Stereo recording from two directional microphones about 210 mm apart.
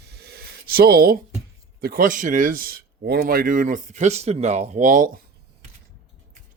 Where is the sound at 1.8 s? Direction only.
40° right (ahead or behind).